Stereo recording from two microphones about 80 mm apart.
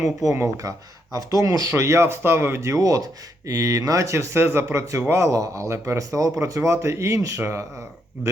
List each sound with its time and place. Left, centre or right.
0.3 s speech: right